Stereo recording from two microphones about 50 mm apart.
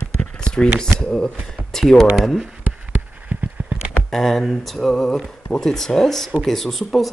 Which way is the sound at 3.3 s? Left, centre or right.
Right.